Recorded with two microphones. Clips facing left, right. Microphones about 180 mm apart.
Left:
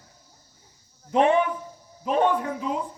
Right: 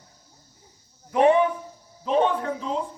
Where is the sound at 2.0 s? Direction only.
10° left (ahead or behind).